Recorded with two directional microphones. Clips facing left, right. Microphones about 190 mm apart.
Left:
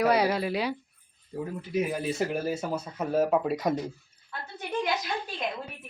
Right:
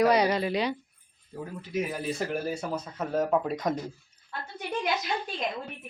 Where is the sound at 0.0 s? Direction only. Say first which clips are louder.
Right 1 dB; 5° left (ahead or behind).